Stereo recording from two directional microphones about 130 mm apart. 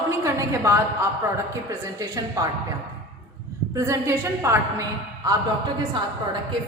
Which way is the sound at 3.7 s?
25° right (ahead or behind).